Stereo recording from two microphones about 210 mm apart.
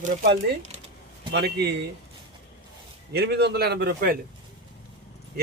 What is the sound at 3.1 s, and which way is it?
Speech, 50° right (ahead or behind).